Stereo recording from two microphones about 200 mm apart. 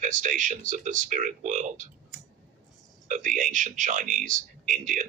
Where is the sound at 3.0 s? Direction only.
40° right (ahead or behind).